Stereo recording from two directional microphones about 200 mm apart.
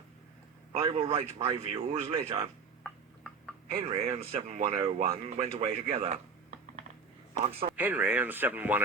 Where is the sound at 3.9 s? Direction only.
30° right (ahead or behind).